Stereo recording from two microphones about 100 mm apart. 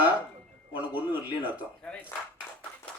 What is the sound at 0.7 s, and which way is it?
Speech, 15° right (ahead or behind).